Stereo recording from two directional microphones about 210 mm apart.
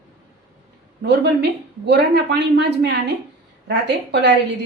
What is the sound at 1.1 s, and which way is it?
A woman's voice, 50° right (ahead or behind).